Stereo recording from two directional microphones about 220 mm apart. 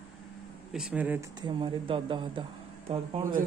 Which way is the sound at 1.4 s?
20° right (ahead or behind).